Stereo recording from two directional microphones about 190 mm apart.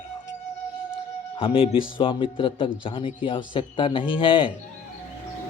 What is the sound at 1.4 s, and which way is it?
A man's voice, 30° left (ahead or behind).